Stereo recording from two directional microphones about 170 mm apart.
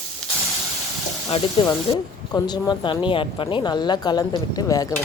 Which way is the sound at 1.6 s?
30° left (ahead or behind).